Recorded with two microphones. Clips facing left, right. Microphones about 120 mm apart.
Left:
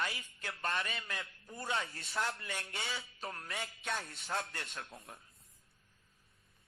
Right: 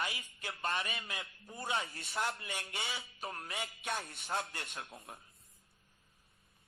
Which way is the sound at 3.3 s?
25° right (ahead or behind).